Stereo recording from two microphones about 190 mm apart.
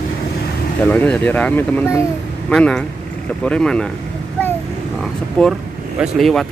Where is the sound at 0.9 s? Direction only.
10° left (ahead or behind).